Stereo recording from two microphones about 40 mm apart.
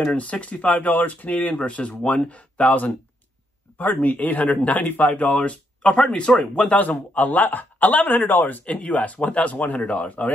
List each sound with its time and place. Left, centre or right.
0.2 s speech: left
3.7 s speech: left
6.7 s a man's voice: left
8.6 s speech: left